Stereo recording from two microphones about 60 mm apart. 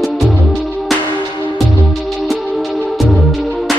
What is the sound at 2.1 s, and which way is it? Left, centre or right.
Music, centre.